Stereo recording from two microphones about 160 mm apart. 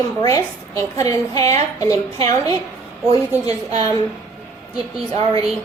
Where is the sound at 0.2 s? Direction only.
20° left (ahead or behind).